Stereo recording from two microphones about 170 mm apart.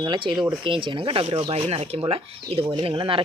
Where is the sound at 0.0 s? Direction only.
25° right (ahead or behind).